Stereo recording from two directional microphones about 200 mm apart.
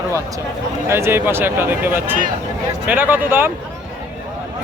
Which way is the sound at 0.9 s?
10° right (ahead or behind).